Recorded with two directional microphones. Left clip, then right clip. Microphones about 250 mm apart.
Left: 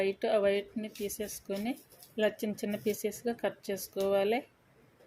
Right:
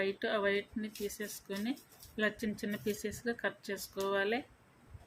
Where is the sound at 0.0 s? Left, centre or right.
Centre.